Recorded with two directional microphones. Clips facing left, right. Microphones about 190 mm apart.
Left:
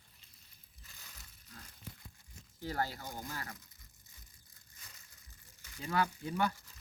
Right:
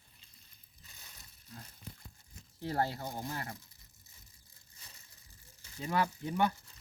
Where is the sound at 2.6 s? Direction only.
30° right (ahead or behind).